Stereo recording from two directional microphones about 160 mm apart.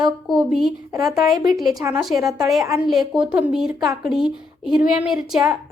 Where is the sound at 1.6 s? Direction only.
25° right (ahead or behind).